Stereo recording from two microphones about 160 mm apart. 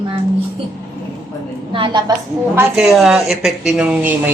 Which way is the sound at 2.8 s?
Centre (ahead or behind).